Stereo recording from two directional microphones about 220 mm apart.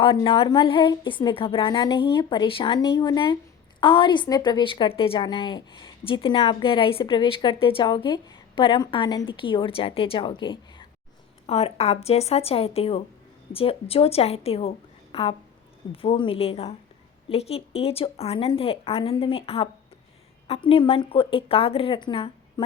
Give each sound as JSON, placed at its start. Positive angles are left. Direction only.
{"t": 0.0, "sound": "a woman's voice", "side_deg": 25}